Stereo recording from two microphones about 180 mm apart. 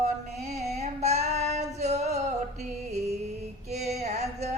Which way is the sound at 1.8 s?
40° right (ahead or behind).